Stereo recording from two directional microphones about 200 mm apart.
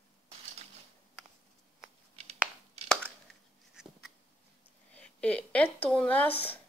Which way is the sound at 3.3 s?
5° left (ahead or behind).